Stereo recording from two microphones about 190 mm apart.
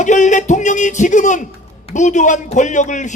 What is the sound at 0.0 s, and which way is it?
A man's voice, 40° left (ahead or behind).